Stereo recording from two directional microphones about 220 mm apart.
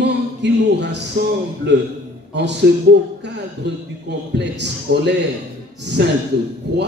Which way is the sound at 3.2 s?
50° right (ahead or behind).